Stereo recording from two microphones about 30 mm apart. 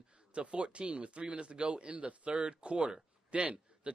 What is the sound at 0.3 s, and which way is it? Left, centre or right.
A man's voice, right.